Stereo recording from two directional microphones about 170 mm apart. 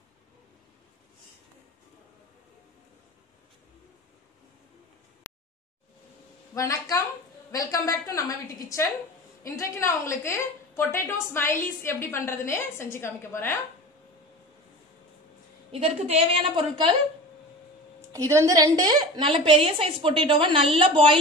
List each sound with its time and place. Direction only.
6.5 s a sound: 20° left (ahead or behind)
9.4 s a woman's voice: 15° left (ahead or behind)
15.7 s a woman's voice: 35° right (ahead or behind)
18.1 s a woman's voice: 20° right (ahead or behind)